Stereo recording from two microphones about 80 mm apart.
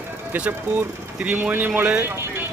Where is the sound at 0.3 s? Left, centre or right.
Centre.